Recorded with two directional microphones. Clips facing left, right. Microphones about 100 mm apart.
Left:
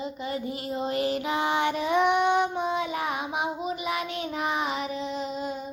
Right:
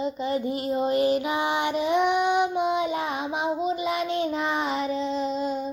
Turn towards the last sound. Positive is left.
turn(degrees=-30)  # may be behind; listen again after turning